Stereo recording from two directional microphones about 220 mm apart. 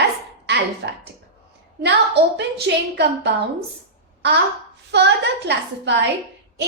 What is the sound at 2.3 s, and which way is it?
A woman's voice, 50° right (ahead or behind).